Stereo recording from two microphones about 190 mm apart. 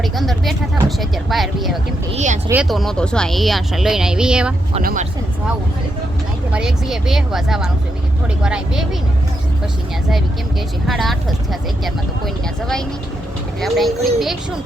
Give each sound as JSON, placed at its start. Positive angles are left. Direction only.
{"t": 0.0, "sound": "speech", "side_deg": 0}
{"t": 2.1, "sound": "speech", "side_deg": -40}
{"t": 2.5, "sound": "speech", "side_deg": -5}
{"t": 4.8, "sound": "speech", "side_deg": -50}
{"t": 6.5, "sound": "speech", "side_deg": -5}
{"t": 10.8, "sound": "speech", "side_deg": 0}